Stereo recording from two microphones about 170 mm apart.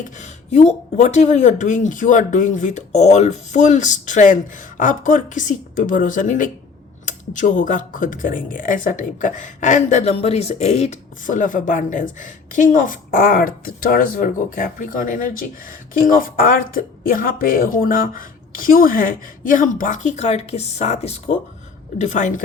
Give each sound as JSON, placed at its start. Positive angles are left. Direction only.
{"t": 0.5, "sound": "speech", "side_deg": 40}